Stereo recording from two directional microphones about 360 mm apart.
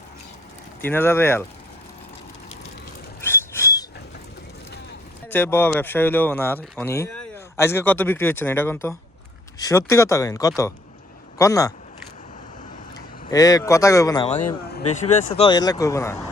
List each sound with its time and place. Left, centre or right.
0.8 s speech: centre
3.2 s a sound: centre
5.3 s speech: centre
13.3 s speech: centre
14.6 s speech: left
15.4 s speech: centre